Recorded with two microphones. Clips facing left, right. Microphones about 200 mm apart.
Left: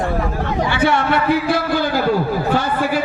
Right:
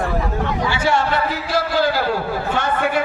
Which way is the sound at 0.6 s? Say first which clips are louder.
Left 3 dB; 60° left (ahead or behind).